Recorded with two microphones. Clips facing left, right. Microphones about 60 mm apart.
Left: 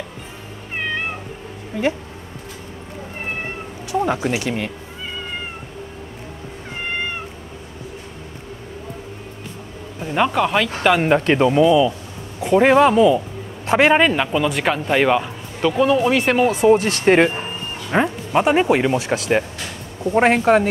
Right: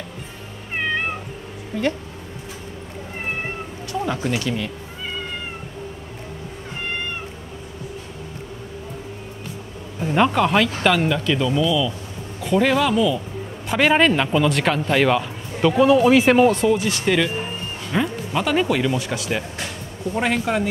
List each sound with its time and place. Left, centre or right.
1.7 s speech: centre
4.0 s speech: left
4.5 s speech: left
9.9 s speech: centre
11.0 s speech: left
12.4 s speech: left
15.6 s speech: centre
16.7 s speech: left
19.1 s speech: left